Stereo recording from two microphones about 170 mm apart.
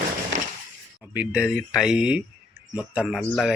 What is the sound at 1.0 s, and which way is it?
Speech, 10° right (ahead or behind).